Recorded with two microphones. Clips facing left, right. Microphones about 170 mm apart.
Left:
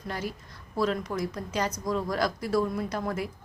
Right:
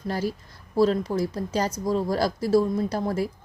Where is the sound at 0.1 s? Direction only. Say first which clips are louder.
Right 6 dB; 35° right (ahead or behind).